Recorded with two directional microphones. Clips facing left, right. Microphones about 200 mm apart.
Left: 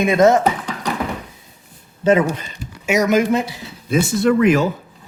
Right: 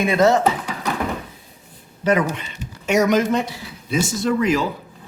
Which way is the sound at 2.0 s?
25° left (ahead or behind).